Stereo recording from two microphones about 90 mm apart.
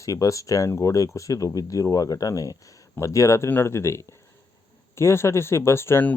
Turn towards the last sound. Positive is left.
turn(degrees=30)  # may be behind; listen again after turning